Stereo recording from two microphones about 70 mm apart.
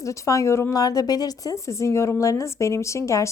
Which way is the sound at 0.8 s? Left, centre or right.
Left.